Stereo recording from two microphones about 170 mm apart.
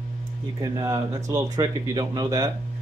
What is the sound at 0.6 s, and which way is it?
Speech, 20° right (ahead or behind).